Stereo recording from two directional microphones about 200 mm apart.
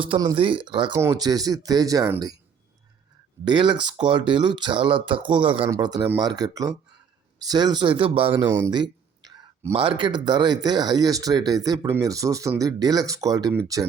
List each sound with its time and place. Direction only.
0.0 s speech: 25° right (ahead or behind)
3.4 s speech: 25° right (ahead or behind)
8.4 s speech: 15° right (ahead or behind)